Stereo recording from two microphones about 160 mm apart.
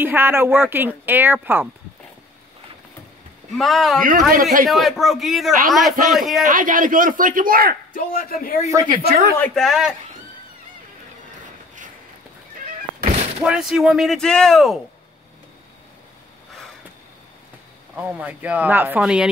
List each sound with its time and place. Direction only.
0.0 s a woman's voice: 15° right (ahead or behind)
3.5 s speech: centre (ahead or behind)
4.3 s speech: 60° right (ahead or behind)
4.6 s speech: centre (ahead or behind)
6.4 s speech: 55° right (ahead or behind)
7.9 s a man's voice: 65° left (ahead or behind)
8.6 s speech: 20° right (ahead or behind)
9.4 s speech: 5° left (ahead or behind)
13.4 s speech: 5° right (ahead or behind)
18.2 s a woman's voice: 10° right (ahead or behind)